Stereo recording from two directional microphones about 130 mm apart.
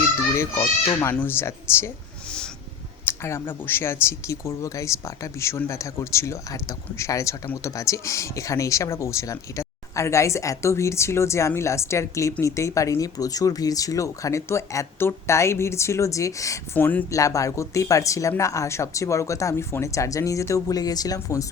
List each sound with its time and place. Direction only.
0.3 s speech: 20° left (ahead or behind)
3.1 s speech: 20° left (ahead or behind)